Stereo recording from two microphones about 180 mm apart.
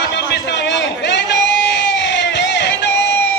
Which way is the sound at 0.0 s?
70° left (ahead or behind).